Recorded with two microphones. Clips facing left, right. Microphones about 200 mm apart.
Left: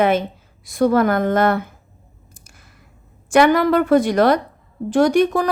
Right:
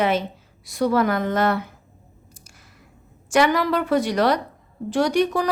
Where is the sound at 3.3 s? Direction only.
55° left (ahead or behind).